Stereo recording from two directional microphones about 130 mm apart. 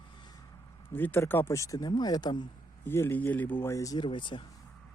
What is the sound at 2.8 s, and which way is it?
Speech, 15° left (ahead or behind).